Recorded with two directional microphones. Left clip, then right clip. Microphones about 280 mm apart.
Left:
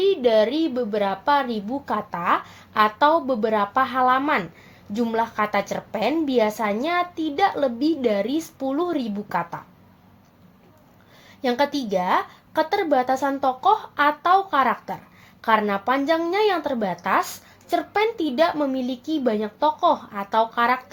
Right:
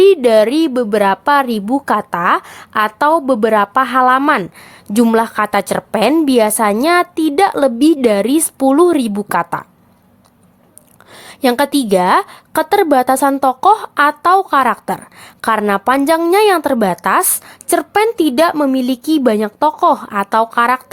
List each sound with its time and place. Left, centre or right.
0.0 s a woman's voice: right
11.2 s a woman's voice: right